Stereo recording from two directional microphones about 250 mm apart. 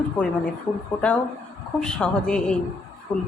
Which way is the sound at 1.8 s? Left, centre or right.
Centre.